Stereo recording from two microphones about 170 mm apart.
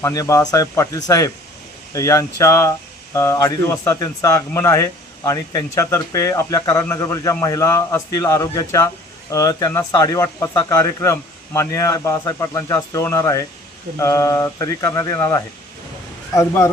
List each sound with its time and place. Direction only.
0.0 s speech: 20° left (ahead or behind)